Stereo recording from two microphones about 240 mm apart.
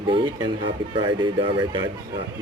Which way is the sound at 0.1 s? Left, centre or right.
Centre.